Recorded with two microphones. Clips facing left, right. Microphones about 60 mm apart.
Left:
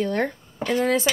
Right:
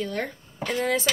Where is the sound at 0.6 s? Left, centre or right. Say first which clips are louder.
Left 4 dB; centre.